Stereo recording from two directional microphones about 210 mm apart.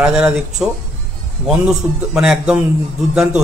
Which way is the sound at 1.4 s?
5° right (ahead or behind).